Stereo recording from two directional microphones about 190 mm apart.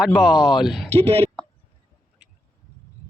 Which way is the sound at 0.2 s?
5° right (ahead or behind).